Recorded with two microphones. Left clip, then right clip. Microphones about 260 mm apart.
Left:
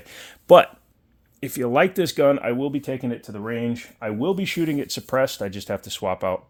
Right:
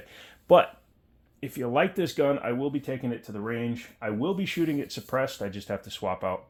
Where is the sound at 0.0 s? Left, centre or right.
Left.